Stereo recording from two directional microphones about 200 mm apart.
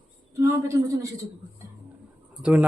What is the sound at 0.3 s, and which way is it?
Speech, 15° right (ahead or behind).